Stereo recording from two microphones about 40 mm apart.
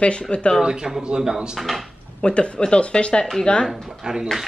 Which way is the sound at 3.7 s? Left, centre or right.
Centre.